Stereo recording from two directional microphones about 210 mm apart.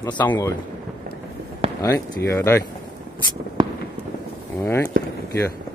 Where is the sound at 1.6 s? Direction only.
25° right (ahead or behind).